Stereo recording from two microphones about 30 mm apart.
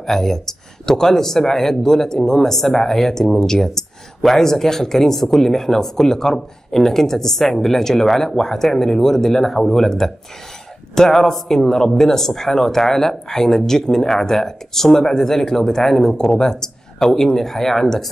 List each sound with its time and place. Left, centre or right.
0.0 s speech: centre
3.3 s speech: centre
16.3 s speech: centre